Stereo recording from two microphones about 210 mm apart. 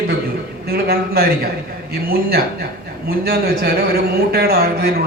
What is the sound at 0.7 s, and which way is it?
A man's voice, 45° right (ahead or behind).